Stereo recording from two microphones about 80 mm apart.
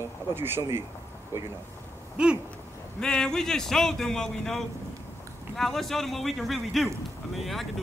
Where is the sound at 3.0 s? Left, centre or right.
Centre.